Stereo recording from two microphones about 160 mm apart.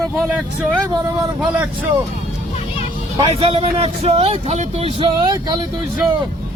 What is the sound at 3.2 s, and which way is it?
Speech, 35° right (ahead or behind).